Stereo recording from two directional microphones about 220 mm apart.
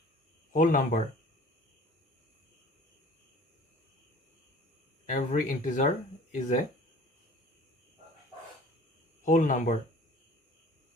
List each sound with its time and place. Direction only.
0.5 s speech: 35° left (ahead or behind)
5.0 s speech: 35° left (ahead or behind)
9.2 s speech: 35° left (ahead or behind)